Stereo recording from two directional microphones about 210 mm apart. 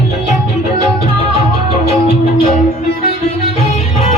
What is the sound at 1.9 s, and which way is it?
Music, 30° left (ahead or behind).